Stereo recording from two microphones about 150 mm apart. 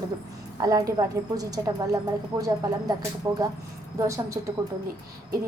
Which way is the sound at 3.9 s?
20° right (ahead or behind).